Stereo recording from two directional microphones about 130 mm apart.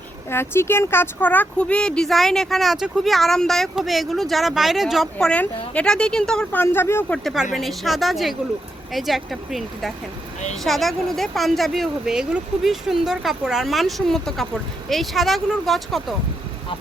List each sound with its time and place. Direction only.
0.3 s speech: 20° left (ahead or behind); by 5.0 s centre (ahead or behind)
5.2 s a woman's voice: 10° left (ahead or behind)
6.6 s speech: 20° left (ahead or behind)
7.1 s speech: centre (ahead or behind)